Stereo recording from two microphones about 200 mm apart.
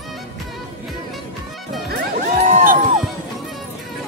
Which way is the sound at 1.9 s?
45° right (ahead or behind).